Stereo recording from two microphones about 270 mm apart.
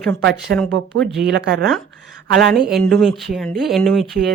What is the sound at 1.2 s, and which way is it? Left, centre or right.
Speech, right.